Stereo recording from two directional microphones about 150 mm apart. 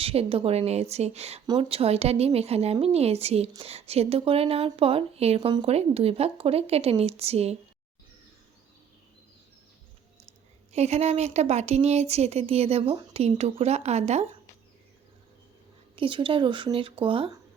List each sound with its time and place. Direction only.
0.0 s speech: 40° right (ahead or behind)
10.7 s speech: 45° right (ahead or behind)
16.0 s speech: 35° right (ahead or behind)